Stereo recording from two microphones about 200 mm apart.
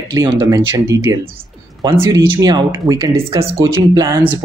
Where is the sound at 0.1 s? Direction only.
20° right (ahead or behind).